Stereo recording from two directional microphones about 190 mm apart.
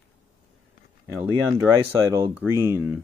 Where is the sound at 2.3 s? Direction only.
10° right (ahead or behind).